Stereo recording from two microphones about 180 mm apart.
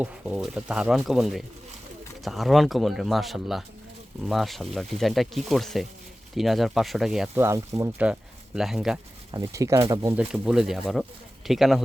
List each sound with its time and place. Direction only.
0.0 s speech: 5° right (ahead or behind)
7.4 s speech: 15° right (ahead or behind)
9.3 s speech: 15° right (ahead or behind)
10.2 s speech: 5° right (ahead or behind)